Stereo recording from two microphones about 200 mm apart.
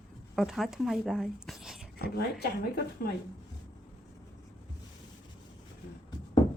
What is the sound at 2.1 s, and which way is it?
A woman's voice, 50° left (ahead or behind).